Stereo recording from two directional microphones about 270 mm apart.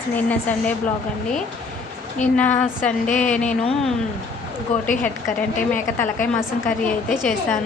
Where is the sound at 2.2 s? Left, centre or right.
Centre.